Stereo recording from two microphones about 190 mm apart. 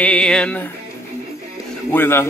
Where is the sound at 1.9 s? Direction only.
10° left (ahead or behind).